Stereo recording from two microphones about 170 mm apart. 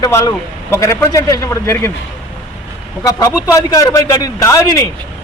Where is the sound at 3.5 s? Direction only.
20° left (ahead or behind).